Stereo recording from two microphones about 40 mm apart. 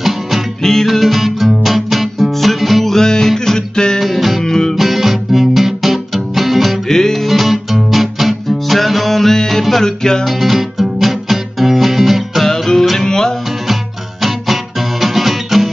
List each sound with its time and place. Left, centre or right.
0.6 s music: centre
0.8 s music: centre
4.0 s music: centre
4.4 s music: centre
4.7 s music: centre
6.9 s music: centre
7.2 s music: centre
9.8 s music: centre
10.2 s music: centre
12.4 s music: centre
13.0 s music: centre
14.2 s music: centre